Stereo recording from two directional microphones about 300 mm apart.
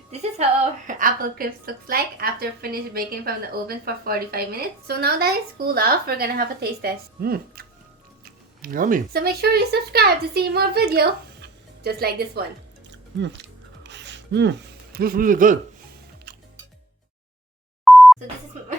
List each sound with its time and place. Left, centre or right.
0.1 s a woman's voice: right
13.1 s music: right
14.9 s a man's voice: right
17.8 s beep: centre